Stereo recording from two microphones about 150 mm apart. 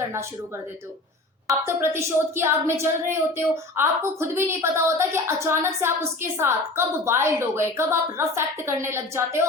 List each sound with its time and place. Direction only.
1.6 s speech: 15° right (ahead or behind)